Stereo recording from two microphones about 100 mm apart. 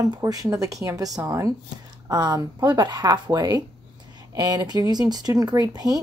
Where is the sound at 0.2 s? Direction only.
35° right (ahead or behind).